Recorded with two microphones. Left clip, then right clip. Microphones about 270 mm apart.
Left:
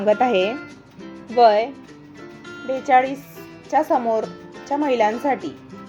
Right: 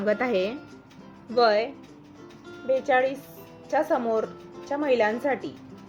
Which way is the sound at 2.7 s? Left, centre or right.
Left.